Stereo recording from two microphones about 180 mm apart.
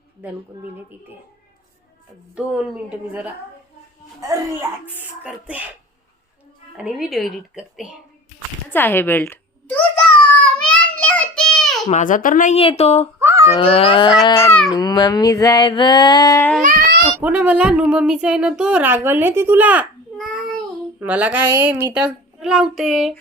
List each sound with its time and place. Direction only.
2.3 s speech: 5° right (ahead or behind)
4.9 s speech: 10° right (ahead or behind)
6.7 s a woman's voice: 5° right (ahead or behind)
8.7 s a sound: 10° left (ahead or behind)
10.7 s child singing: 5° left (ahead or behind)
11.9 s speech: 45° left (ahead or behind)
12.5 s speech: 35° left (ahead or behind)
13.1 s babbling: 15° right (ahead or behind)
13.5 s a sound: 35° left (ahead or behind)
16.6 s baby cry: 50° right (ahead or behind)
17.2 s speech: 10° right (ahead or behind)
20.1 s child singing: centre (ahead or behind)
21.0 s speech: 10° right (ahead or behind)